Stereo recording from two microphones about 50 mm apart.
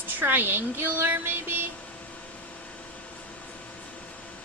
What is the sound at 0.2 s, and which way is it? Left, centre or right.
Speech, right.